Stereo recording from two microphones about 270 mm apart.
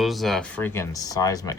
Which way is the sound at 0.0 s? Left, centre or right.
Centre.